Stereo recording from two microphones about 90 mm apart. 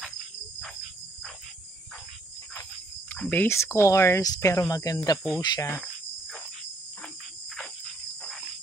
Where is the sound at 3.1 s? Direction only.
20° left (ahead or behind).